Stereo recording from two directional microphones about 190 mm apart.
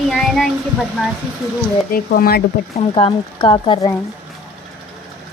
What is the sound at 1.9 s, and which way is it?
Speech, 50° left (ahead or behind).